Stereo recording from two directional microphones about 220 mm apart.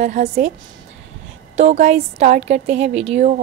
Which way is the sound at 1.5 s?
30° right (ahead or behind).